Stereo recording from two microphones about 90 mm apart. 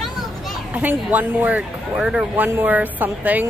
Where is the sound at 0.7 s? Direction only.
20° right (ahead or behind).